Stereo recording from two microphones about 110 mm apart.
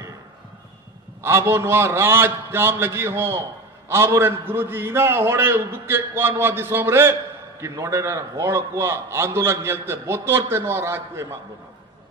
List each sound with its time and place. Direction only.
1.2 s a man's voice: 25° right (ahead or behind)